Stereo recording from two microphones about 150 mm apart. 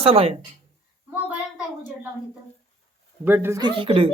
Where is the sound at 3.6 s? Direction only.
35° right (ahead or behind).